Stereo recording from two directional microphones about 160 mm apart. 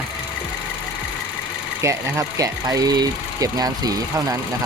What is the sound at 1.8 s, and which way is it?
Speech, 20° right (ahead or behind).